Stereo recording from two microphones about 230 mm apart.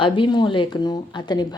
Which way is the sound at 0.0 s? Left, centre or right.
Left.